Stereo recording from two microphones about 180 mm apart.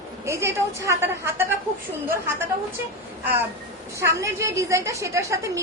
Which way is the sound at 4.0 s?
15° right (ahead or behind).